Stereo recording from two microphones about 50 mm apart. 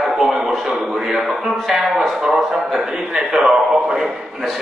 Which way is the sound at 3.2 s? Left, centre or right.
Centre.